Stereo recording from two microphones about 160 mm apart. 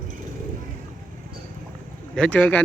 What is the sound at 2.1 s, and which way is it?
Speech, 5° left (ahead or behind).